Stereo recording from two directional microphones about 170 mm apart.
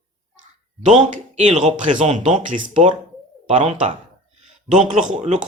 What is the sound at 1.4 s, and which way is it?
A man's voice, 45° right (ahead or behind).